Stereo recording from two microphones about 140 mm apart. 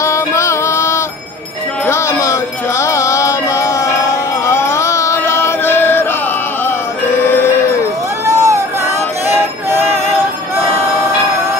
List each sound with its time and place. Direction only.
0.0 s music: 20° left (ahead or behind)
7.2 s sheep: 15° left (ahead or behind)
8.3 s music: 20° right (ahead or behind)